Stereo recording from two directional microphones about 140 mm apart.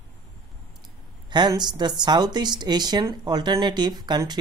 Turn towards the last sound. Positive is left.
turn(degrees=-30)  # may be behind; listen again after turning